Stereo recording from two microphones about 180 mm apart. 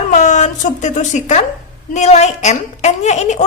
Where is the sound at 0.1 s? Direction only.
40° left (ahead or behind).